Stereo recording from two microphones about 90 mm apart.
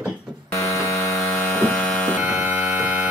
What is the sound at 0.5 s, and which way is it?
Buzzer, 35° left (ahead or behind).